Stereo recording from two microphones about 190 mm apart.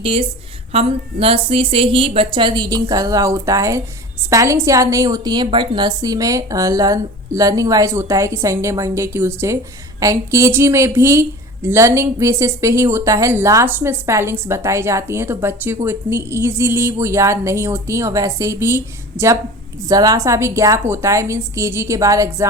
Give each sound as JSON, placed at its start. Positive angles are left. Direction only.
{"t": 0.0, "sound": "a woman's voice", "side_deg": -30}